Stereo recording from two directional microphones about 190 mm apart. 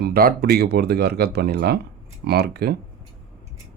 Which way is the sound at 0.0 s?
50° right (ahead or behind).